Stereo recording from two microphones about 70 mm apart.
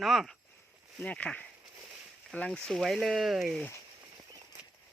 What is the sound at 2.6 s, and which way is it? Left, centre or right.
Speech, centre.